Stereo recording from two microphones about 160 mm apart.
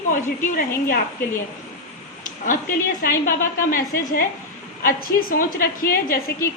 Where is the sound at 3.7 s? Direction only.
60° left (ahead or behind).